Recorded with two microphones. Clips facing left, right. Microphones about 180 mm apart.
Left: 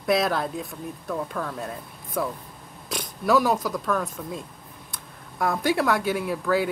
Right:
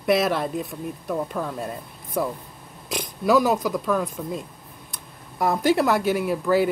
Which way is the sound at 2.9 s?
Centre (ahead or behind).